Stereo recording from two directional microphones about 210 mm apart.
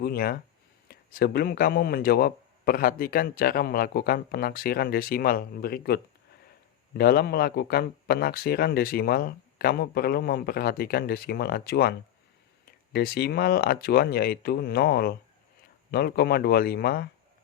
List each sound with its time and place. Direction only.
0.0 s speech: 45° left (ahead or behind)